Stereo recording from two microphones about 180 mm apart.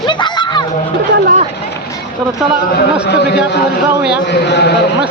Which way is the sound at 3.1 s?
65° left (ahead or behind).